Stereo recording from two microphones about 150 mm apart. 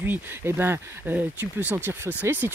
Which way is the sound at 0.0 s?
15° right (ahead or behind).